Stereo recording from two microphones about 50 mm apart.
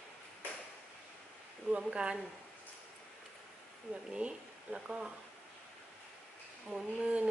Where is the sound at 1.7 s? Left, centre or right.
Right.